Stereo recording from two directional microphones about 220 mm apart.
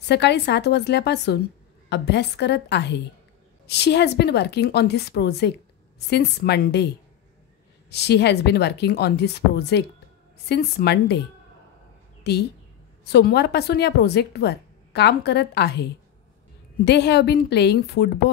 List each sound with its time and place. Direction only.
0.0 s a woman's voice: 50° left (ahead or behind)
7.9 s a woman's voice: 50° left (ahead or behind)
12.2 s a woman's voice: 50° left (ahead or behind)